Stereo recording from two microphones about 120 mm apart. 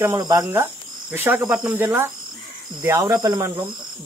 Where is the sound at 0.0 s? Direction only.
30° right (ahead or behind).